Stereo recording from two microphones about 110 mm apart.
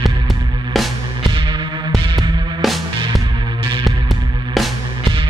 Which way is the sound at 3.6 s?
50° right (ahead or behind).